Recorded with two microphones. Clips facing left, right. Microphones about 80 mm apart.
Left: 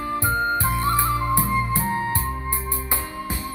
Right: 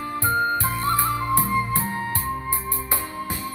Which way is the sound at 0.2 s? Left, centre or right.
Centre.